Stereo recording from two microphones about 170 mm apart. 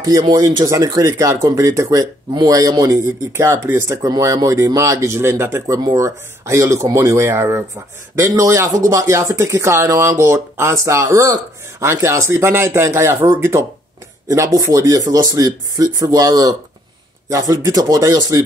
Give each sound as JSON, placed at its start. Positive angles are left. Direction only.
{"t": 0.0, "sound": "speech", "side_deg": -20}